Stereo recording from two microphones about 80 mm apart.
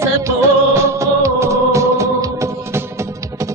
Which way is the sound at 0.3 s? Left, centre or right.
Right.